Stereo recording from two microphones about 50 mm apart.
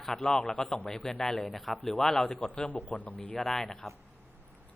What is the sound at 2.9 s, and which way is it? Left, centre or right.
Speech, left.